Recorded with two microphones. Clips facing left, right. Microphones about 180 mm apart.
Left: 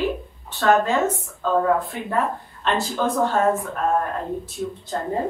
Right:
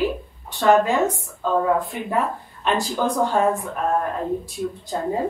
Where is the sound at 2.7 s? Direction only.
15° right (ahead or behind).